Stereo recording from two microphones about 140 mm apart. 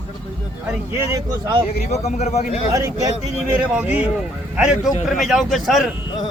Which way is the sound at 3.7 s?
10° right (ahead or behind).